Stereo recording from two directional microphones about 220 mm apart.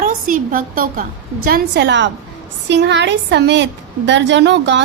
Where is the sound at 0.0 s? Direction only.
40° right (ahead or behind).